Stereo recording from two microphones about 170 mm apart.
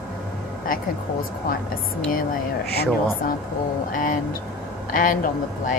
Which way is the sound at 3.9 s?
50° left (ahead or behind).